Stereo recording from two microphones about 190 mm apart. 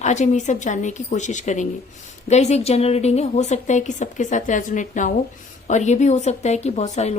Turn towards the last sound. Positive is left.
turn(degrees=35)  # may be behind; listen again after turning